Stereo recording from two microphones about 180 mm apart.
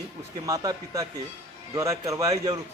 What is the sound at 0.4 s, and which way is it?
A man's voice, 20° right (ahead or behind).